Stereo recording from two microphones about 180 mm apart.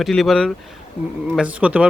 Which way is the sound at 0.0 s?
Centre (ahead or behind).